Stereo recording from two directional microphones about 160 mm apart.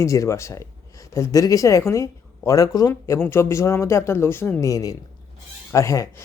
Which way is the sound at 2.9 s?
10° left (ahead or behind).